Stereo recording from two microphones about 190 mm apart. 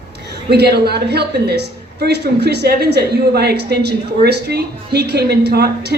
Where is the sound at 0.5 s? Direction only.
55° right (ahead or behind).